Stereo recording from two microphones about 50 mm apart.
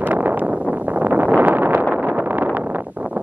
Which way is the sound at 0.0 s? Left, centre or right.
Right.